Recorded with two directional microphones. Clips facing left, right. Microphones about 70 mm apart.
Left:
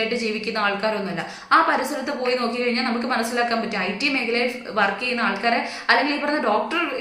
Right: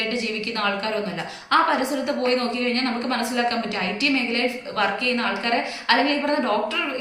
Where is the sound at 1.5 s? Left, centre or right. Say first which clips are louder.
Left 1 dB; left.